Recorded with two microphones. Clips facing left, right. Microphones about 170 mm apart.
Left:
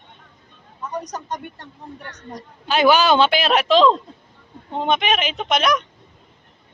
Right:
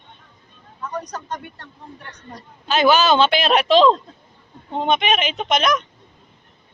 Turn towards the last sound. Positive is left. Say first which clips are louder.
# even
turn(degrees=5)  # may be behind; listen again after turning